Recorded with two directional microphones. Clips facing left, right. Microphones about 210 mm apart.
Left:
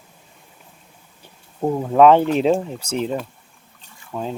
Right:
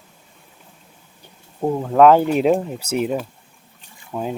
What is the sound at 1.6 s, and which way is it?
Speech, 5° left (ahead or behind).